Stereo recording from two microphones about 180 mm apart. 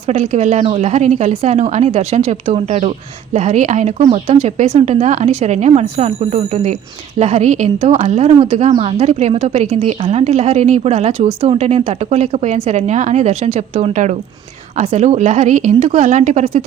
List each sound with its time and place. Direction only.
0.1 s a woman's voice: 40° right (ahead or behind)